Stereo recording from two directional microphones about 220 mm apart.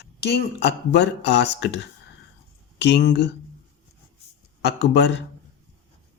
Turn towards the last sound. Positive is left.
turn(degrees=50)  # may be behind; listen again after turning